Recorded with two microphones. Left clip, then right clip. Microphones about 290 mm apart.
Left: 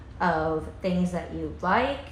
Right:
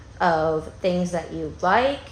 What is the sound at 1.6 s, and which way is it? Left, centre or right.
Speech, right.